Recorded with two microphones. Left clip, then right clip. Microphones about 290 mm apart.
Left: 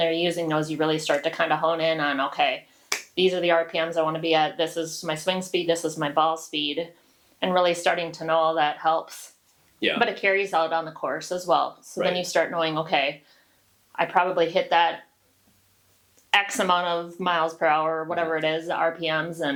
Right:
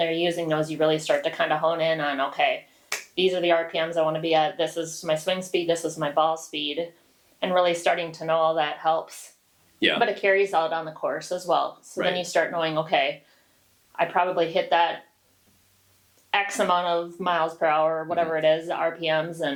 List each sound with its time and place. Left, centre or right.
0.0 s speech: left
16.3 s speech: left